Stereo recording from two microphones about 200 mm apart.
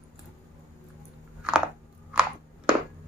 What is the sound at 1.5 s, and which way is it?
Chewing, 5° right (ahead or behind).